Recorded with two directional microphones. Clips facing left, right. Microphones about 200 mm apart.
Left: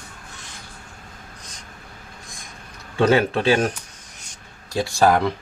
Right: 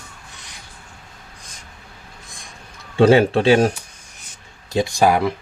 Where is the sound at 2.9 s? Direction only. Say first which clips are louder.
Right 5 dB; 30° right (ahead or behind).